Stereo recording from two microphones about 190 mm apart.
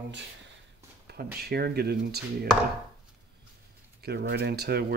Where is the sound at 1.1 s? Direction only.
55° right (ahead or behind).